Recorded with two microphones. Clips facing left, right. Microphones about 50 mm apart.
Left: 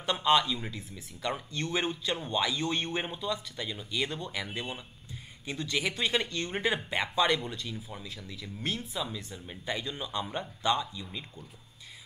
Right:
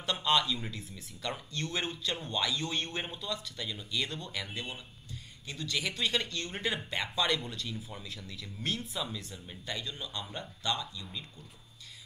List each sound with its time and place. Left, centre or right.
0.0 s speech: centre
9.5 s speech: centre